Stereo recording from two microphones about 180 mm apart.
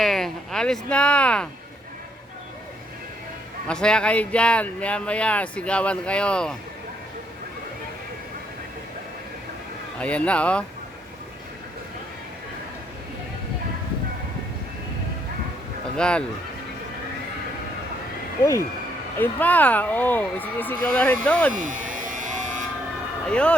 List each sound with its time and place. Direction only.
0.0 s speech: centre (ahead or behind)
3.7 s speech: 5° left (ahead or behind)
10.0 s speech: 5° left (ahead or behind)
16.0 s speech: 5° left (ahead or behind)
19.1 s speech: 10° left (ahead or behind)
21.5 s a sound: 45° right (ahead or behind)
23.2 s speech: 5° left (ahead or behind)